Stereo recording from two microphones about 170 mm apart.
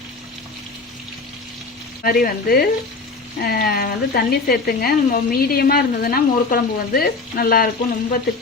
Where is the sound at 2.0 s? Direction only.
60° left (ahead or behind).